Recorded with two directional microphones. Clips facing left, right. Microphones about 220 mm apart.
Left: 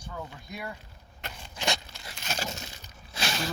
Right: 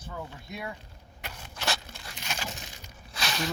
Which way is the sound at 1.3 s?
15° left (ahead or behind).